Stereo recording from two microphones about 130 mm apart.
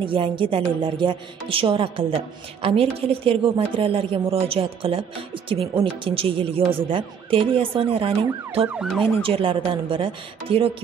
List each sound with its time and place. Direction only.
0.0 s a woman's voice: 40° right (ahead or behind)
8.6 s ambulance: 5° right (ahead or behind)
9.2 s a woman's voice: 45° right (ahead or behind)